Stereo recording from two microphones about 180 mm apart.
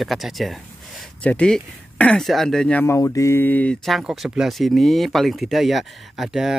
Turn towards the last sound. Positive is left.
turn(degrees=0)  # may be behind; listen again after turning